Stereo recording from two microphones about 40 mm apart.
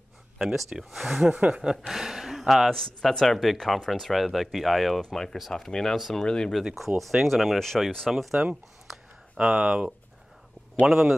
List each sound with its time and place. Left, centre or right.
0.4 s speech: centre
1.3 s speech: right
1.6 s speech: centre
2.7 s speech: centre
5.5 s speech: centre
7.0 s speech: centre
8.1 s speech: centre
9.4 s speech: right
10.9 s speech: centre